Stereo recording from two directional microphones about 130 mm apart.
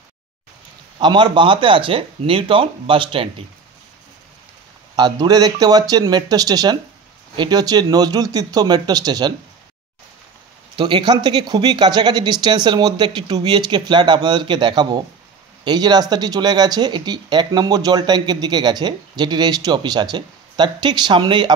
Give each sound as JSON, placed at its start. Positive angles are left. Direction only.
{"t": 0.9, "sound": "speech", "side_deg": -35}
{"t": 4.9, "sound": "speech", "side_deg": -35}
{"t": 10.8, "sound": "speech", "side_deg": -35}